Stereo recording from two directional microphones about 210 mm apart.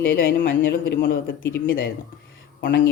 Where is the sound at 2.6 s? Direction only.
55° left (ahead or behind).